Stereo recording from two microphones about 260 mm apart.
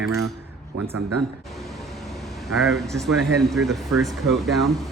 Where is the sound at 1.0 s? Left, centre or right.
Right.